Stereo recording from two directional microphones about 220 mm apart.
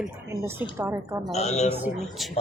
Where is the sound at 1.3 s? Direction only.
30° left (ahead or behind).